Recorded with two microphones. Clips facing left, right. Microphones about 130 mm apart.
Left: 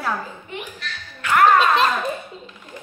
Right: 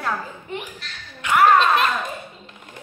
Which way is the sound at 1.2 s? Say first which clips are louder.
Even; 20° right (ahead or behind).